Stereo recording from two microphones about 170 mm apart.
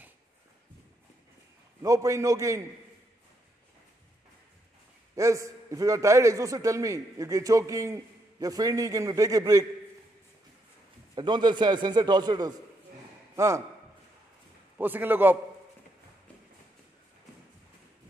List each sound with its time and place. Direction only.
1.8 s a man's voice: 20° right (ahead or behind)
5.1 s a man's voice: 20° right (ahead or behind)
11.1 s a man's voice: 25° right (ahead or behind)
14.8 s a man's voice: 10° right (ahead or behind)